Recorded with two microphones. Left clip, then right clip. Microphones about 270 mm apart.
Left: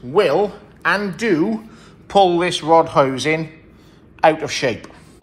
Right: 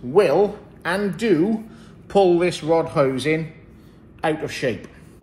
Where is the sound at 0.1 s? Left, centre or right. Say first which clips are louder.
Left 1 dB; left.